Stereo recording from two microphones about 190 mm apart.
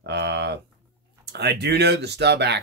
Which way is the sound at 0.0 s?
65° right (ahead or behind).